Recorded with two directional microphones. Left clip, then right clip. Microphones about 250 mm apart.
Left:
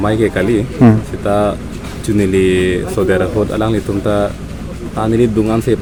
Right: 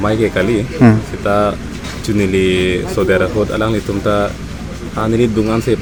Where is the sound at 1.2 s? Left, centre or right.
Centre.